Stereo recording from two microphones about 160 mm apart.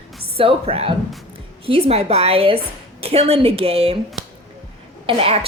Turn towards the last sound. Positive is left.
turn(degrees=-35)  # may be behind; listen again after turning